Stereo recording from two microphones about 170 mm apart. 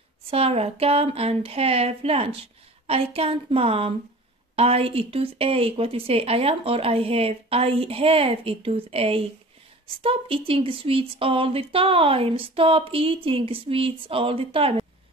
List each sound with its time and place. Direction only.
0.3 s speech: 35° right (ahead or behind)